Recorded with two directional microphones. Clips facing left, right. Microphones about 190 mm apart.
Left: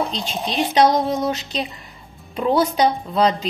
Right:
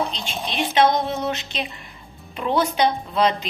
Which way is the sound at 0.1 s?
40° left (ahead or behind).